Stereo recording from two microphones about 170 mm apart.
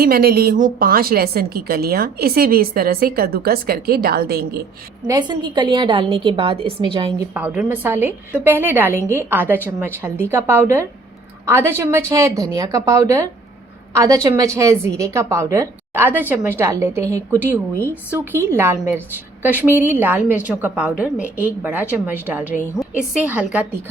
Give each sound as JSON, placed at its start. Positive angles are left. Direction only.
{"t": 0.0, "sound": "a woman's voice", "side_deg": -60}
{"t": 5.0, "sound": "a woman's voice", "side_deg": -25}
{"t": 7.3, "sound": "a woman's voice", "side_deg": -5}